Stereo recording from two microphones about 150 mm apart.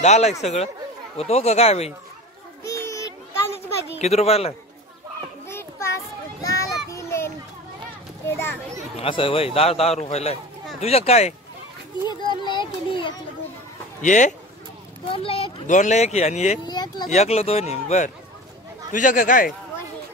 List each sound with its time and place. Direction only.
0.0 s speech: 50° left (ahead or behind)
2.6 s a sound: 20° left (ahead or behind)
4.0 s speech: 45° left (ahead or behind)
5.5 s a sound: 15° left (ahead or behind)
6.9 s children playing: 20° left (ahead or behind)
8.3 s a child's voice: 15° left (ahead or behind)
9.0 s a man's voice: 35° left (ahead or behind)
12.1 s children playing: 30° left (ahead or behind)
14.0 s a man's voice: 55° left (ahead or behind)
15.0 s a man's voice: 40° left (ahead or behind)
15.6 s speech: 55° left (ahead or behind)
16.6 s speech: 30° left (ahead or behind)
17.1 s speech: 45° left (ahead or behind)
18.9 s a man's voice: 60° left (ahead or behind)